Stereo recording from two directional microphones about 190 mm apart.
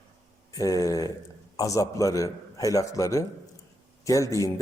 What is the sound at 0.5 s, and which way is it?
A man's voice, 20° left (ahead or behind).